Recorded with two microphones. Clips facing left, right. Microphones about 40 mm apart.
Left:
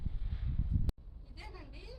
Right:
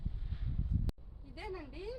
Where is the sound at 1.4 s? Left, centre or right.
Centre.